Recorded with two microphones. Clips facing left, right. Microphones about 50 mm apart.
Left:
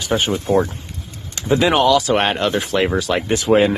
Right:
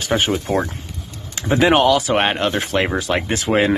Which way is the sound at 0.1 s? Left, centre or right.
Right.